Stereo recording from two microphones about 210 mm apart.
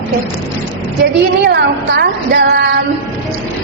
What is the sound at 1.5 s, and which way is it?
A woman's voice, 45° right (ahead or behind).